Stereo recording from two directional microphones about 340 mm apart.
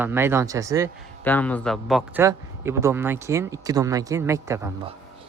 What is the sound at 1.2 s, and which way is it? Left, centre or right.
Speech, centre.